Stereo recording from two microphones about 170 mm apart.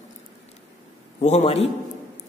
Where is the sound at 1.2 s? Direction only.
40° left (ahead or behind).